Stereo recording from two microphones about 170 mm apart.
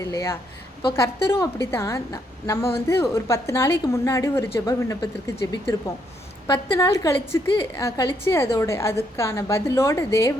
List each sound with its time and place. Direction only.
0.0 s a woman's voice: 20° left (ahead or behind)